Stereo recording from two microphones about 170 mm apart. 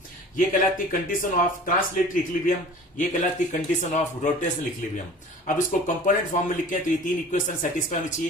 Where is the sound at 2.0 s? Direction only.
55° left (ahead or behind).